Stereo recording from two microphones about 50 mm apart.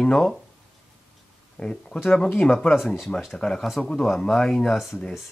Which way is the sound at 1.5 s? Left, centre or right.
Centre.